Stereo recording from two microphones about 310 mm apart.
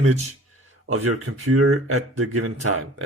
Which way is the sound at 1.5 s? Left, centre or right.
Right.